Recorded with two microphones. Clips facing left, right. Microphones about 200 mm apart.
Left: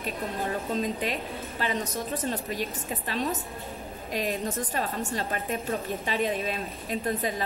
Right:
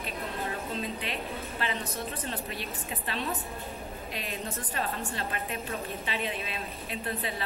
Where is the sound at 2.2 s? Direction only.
40° left (ahead or behind).